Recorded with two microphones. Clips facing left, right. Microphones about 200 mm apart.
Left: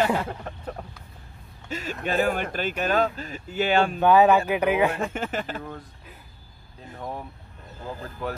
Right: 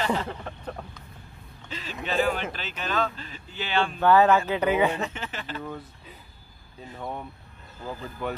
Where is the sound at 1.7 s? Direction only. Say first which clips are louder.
Left 3 dB; 45° left (ahead or behind).